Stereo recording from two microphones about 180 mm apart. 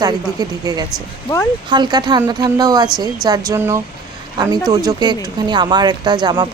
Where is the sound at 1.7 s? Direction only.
25° right (ahead or behind).